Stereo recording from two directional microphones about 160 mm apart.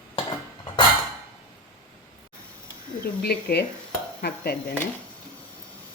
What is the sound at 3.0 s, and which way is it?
Speech, 80° left.